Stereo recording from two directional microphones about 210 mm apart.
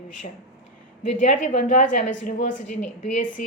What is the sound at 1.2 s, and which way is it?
Speech, 30° left (ahead or behind).